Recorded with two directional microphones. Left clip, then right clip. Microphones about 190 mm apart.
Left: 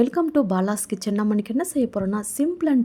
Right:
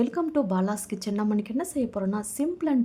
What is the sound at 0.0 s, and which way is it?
A woman's voice, 25° left (ahead or behind).